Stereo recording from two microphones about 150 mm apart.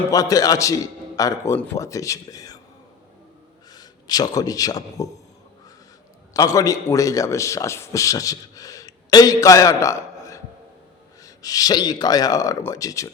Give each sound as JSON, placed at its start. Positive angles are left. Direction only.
{"t": 0.1, "sound": "speech", "side_deg": 25}
{"t": 3.7, "sound": "a man's voice", "side_deg": 25}
{"t": 6.3, "sound": "a man's voice", "side_deg": 25}